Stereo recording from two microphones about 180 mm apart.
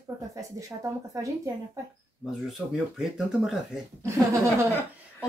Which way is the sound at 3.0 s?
Centre (ahead or behind).